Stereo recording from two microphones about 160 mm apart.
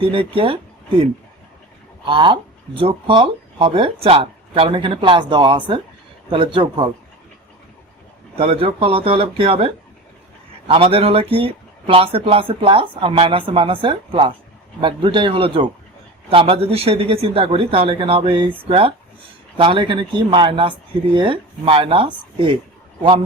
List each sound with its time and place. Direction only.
0.0 s speech: 30° right (ahead or behind)
2.0 s speech: 30° right (ahead or behind)
8.4 s speech: 35° right (ahead or behind)